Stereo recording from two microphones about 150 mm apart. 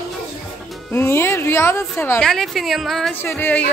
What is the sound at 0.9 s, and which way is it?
A woman's voice, 15° left (ahead or behind).